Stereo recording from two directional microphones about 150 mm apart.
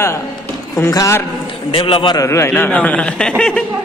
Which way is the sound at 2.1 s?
20° left (ahead or behind).